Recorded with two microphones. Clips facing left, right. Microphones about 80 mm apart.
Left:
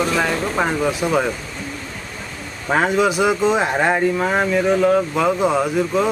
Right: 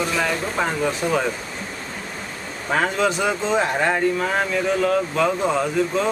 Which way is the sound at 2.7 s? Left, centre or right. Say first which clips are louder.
Left 4 dB; centre.